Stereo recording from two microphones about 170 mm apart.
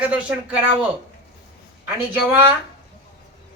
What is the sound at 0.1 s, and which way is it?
Speech, 10° right (ahead or behind).